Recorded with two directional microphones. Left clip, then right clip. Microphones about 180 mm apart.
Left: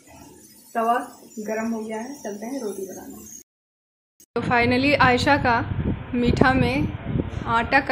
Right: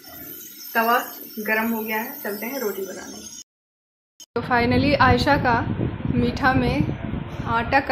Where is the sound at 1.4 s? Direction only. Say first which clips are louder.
Right 5 dB; centre (ahead or behind).